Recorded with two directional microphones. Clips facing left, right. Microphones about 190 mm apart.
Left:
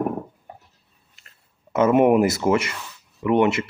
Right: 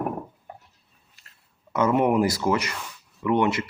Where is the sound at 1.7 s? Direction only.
20° left (ahead or behind).